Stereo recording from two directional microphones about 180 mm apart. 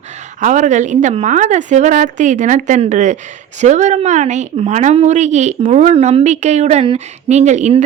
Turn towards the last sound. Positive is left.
turn(degrees=-40)  # may be behind; listen again after turning